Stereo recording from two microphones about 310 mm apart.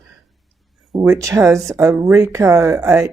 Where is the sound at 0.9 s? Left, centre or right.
Centre.